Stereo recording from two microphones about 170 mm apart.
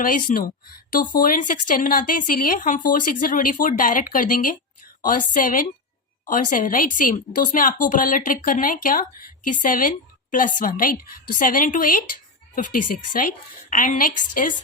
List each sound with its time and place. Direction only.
0.0 s a woman's voice: 55° left (ahead or behind)